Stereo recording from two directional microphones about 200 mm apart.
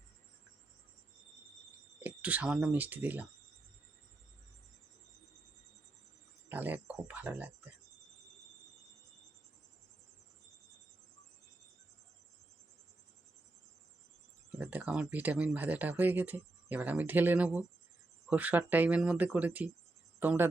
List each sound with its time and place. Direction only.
2.0 s speech: 5° right (ahead or behind)
6.5 s speech: 10° right (ahead or behind)
14.6 s speech: 10° right (ahead or behind)